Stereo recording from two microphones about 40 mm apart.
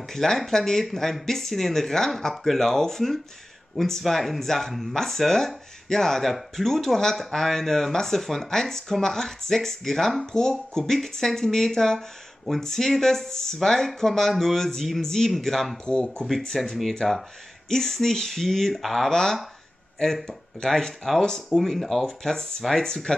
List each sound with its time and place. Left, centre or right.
0.1 s speech: centre
15.8 s speech: left
16.3 s speech: centre
17.0 s speech: centre
19.0 s speech: centre